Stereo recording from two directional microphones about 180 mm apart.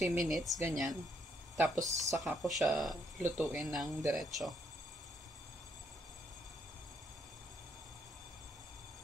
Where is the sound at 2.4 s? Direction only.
Centre (ahead or behind).